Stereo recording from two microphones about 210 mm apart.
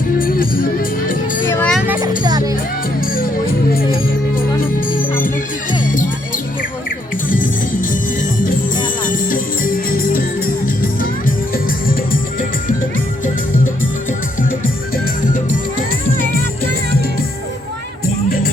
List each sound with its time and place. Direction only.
0.2 s music: 45° left (ahead or behind)
1.5 s music: 10° left (ahead or behind)
2.2 s music: 15° right (ahead or behind)
4.9 s music: 40° left (ahead or behind)
9.0 s music: 40° left (ahead or behind)